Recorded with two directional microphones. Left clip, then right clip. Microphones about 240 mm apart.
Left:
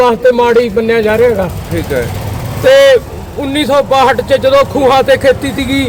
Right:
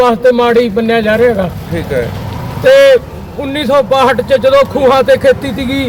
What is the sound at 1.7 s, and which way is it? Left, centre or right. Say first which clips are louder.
Speech: even; centre.